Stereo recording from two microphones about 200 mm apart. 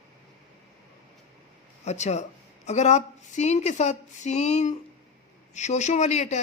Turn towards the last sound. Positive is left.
turn(degrees=35)  # may be behind; listen again after turning